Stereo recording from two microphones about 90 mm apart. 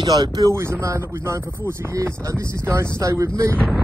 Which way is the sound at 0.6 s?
30° right (ahead or behind).